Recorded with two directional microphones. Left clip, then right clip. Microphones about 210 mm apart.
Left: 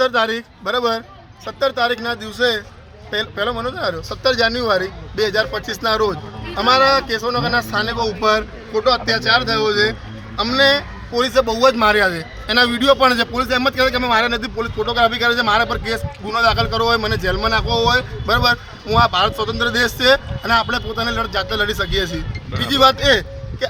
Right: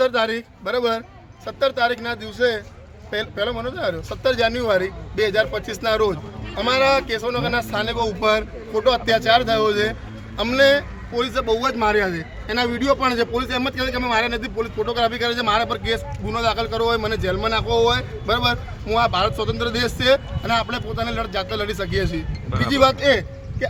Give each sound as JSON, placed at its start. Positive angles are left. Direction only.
{"t": 0.0, "sound": "a man's voice", "side_deg": -5}
{"t": 8.7, "sound": "speech", "side_deg": -30}
{"t": 10.5, "sound": "speech", "side_deg": -20}
{"t": 11.1, "sound": "a man's voice", "side_deg": 15}
{"t": 23.0, "sound": "vehicle", "side_deg": 10}